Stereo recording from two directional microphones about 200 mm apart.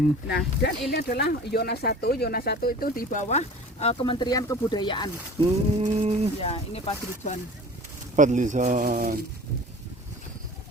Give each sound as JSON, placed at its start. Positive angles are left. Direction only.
{"t": 0.3, "sound": "speech", "side_deg": 55}
{"t": 5.8, "sound": "speech", "side_deg": -35}
{"t": 6.4, "sound": "speech", "side_deg": 30}
{"t": 8.1, "sound": "speech", "side_deg": -40}